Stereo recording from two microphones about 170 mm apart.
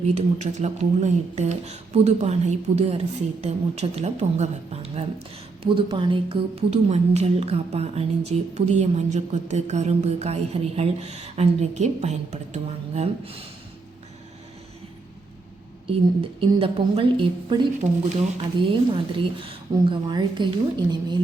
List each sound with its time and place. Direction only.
0.0 s a woman's voice: 40° right (ahead or behind)
16.4 s a woman's voice: 30° right (ahead or behind)